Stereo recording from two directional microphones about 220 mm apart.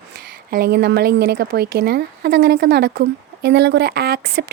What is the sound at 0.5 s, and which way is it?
A woman's voice, 45° right (ahead or behind).